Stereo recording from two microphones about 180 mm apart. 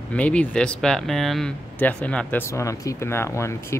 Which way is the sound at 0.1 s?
5° left (ahead or behind).